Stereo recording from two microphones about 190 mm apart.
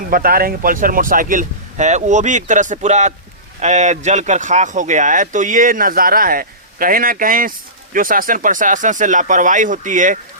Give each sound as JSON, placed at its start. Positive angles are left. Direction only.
{"t": 0.1, "sound": "speech", "side_deg": -50}